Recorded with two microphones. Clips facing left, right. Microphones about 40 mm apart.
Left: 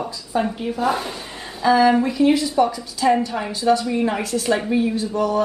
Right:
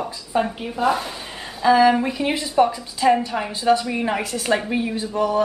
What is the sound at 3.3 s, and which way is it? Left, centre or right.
Speech, centre.